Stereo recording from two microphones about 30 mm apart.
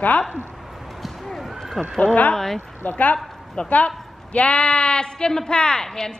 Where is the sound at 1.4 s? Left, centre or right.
Centre.